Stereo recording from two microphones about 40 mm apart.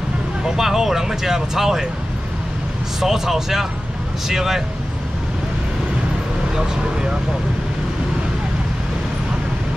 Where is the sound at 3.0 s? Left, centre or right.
Centre.